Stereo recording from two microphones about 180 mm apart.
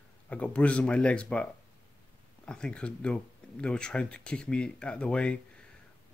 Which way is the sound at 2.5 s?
5° left (ahead or behind).